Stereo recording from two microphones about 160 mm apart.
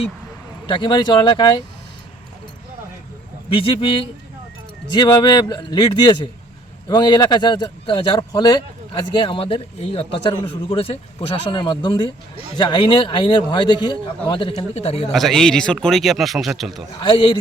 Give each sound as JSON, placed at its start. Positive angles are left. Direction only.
{"t": 0.7, "sound": "speech", "side_deg": 30}
{"t": 3.5, "sound": "a man's voice", "side_deg": 35}
{"t": 14.5, "sound": "a man's voice", "side_deg": 40}
{"t": 15.1, "sound": "a man's voice", "side_deg": 0}
{"t": 17.0, "sound": "speech", "side_deg": 30}